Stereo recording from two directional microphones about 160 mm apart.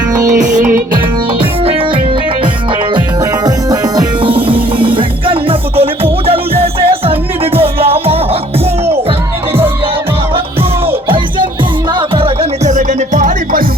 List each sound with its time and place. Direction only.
0.4 s music: 55° right (ahead or behind)
3.4 s music: 25° right (ahead or behind)
11.9 s music: 35° right (ahead or behind)
12.7 s music: 50° right (ahead or behind)